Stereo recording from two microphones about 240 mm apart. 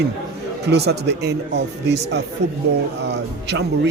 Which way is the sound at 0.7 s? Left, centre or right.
Right.